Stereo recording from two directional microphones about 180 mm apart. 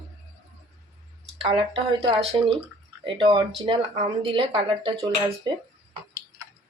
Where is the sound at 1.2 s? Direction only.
30° right (ahead or behind).